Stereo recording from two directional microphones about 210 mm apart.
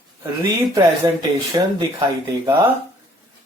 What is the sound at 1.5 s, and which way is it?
Speech, 20° right (ahead or behind).